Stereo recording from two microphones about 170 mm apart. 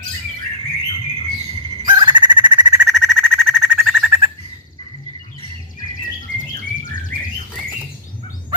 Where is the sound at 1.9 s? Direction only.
30° right (ahead or behind).